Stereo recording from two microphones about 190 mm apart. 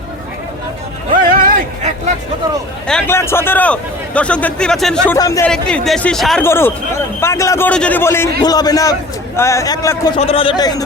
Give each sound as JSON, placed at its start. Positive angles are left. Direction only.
{"t": 1.1, "sound": "music", "side_deg": -50}
{"t": 2.8, "sound": "a man's voice", "side_deg": 5}
{"t": 5.1, "sound": "a man's voice", "side_deg": 20}
{"t": 5.5, "sound": "a man's voice", "side_deg": 5}
{"t": 10.2, "sound": "a man's voice", "side_deg": 30}